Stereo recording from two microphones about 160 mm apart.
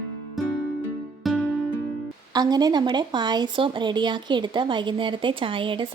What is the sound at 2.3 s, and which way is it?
A woman's voice, 25° right (ahead or behind).